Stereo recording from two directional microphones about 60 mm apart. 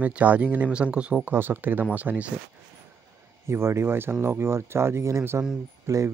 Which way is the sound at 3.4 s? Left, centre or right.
Right.